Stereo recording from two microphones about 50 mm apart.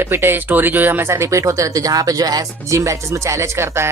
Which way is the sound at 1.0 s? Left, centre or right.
Right.